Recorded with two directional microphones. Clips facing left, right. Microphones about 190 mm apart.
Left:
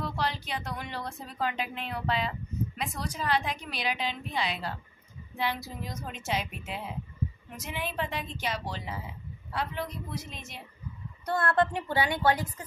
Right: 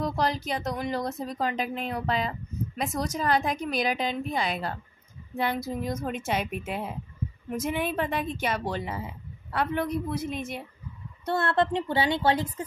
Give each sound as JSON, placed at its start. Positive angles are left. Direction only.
{"t": 0.0, "sound": "a woman's voice", "side_deg": -40}
{"t": 11.2, "sound": "a woman's voice", "side_deg": -25}